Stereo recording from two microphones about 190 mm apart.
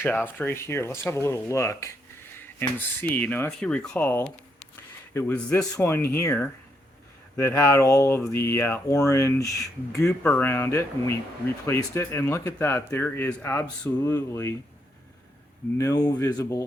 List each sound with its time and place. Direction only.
0.0 s speech: 10° left (ahead or behind)
15.8 s speech: 20° left (ahead or behind)